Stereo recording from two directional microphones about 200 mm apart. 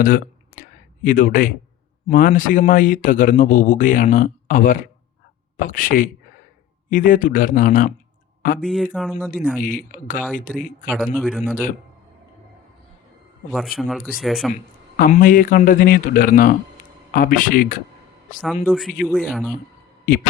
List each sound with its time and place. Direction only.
0.0 s a sound: 45° left (ahead or behind)
2.0 s speech: 40° left (ahead or behind)
8.6 s speech: centre (ahead or behind)
9.6 s speech: 40° left (ahead or behind)
11.0 s a man's voice: 10° left (ahead or behind)
13.5 s speech: centre (ahead or behind)
14.5 s speech: 45° left (ahead or behind)
18.6 s speech: centre (ahead or behind)
20.1 s speech: 45° left (ahead or behind)